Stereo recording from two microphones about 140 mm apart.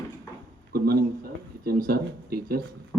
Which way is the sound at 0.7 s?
90° right.